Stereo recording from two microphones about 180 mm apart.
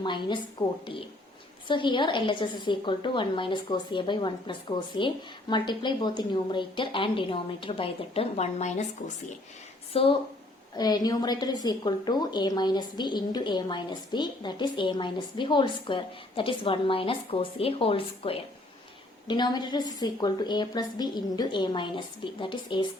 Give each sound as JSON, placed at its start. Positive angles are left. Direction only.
{"t": 0.0, "sound": "a woman's voice", "side_deg": 25}
{"t": 1.6, "sound": "a woman's voice", "side_deg": 25}